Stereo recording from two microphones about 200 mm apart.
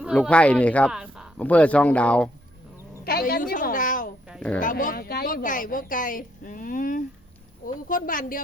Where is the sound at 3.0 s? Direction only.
50° left (ahead or behind).